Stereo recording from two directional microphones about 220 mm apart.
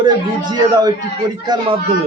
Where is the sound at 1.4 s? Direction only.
20° right (ahead or behind).